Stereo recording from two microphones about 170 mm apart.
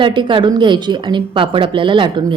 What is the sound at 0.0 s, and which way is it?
A woman's voice, 30° right (ahead or behind).